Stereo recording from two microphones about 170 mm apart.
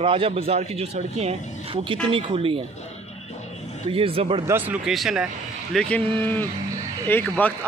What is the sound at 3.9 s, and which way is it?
Speech, 35° right (ahead or behind).